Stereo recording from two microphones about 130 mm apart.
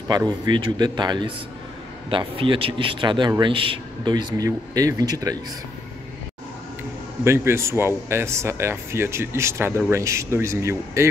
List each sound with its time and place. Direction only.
0.1 s a man's voice: 35° right (ahead or behind)
7.2 s speech: 20° right (ahead or behind)